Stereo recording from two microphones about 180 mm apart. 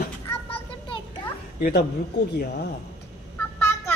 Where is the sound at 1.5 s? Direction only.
55° left (ahead or behind).